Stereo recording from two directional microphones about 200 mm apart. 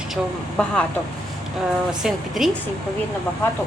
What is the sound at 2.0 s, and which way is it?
Speech, centre (ahead or behind).